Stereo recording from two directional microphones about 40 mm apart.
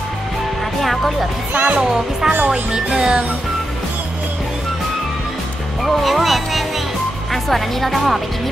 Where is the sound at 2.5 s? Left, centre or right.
Centre.